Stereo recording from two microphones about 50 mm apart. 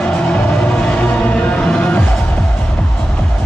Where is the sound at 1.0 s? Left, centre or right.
Left.